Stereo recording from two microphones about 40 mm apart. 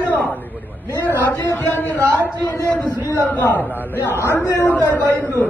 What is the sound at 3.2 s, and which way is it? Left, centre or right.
Speech, left.